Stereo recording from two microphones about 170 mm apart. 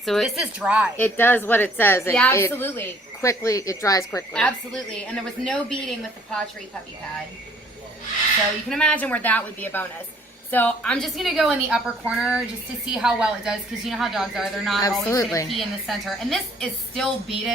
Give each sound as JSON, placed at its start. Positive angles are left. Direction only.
{"t": 0.0, "sound": "a woman's voice", "side_deg": 0}
{"t": 0.9, "sound": "a woman's voice", "side_deg": 10}
{"t": 4.4, "sound": "a woman's voice", "side_deg": 5}
{"t": 8.7, "sound": "a woman's voice", "side_deg": 5}
{"t": 15.1, "sound": "a woman's voice", "side_deg": 20}
{"t": 15.4, "sound": "a woman's voice", "side_deg": 0}